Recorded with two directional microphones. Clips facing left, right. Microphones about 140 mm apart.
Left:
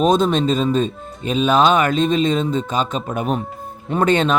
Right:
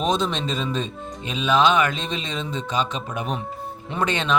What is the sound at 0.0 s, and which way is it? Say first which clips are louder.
Speech: left 8 dB; 50° left (ahead or behind).